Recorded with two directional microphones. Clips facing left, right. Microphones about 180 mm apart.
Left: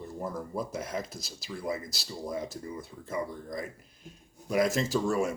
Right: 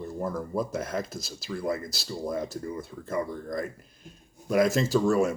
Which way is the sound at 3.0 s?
15° left (ahead or behind).